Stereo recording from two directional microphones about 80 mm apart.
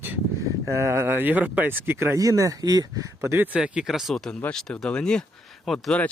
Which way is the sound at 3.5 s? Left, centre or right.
Centre.